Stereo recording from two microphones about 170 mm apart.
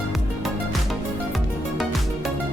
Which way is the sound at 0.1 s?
Centre (ahead or behind).